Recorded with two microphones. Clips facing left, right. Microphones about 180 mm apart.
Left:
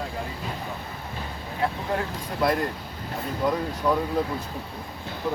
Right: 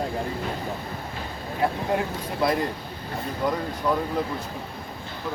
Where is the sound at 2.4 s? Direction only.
Centre (ahead or behind).